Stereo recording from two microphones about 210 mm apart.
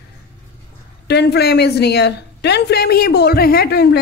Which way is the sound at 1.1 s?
50° left (ahead or behind).